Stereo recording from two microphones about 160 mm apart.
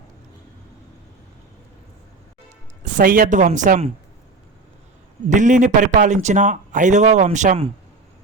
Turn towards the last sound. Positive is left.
turn(degrees=-50)  # may be behind; listen again after turning